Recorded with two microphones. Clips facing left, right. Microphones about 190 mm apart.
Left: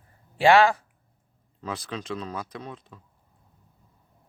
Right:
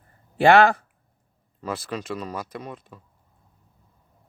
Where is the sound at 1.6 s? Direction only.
5° right (ahead or behind).